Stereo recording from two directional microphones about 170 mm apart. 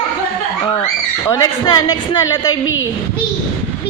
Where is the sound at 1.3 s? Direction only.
20° left (ahead or behind).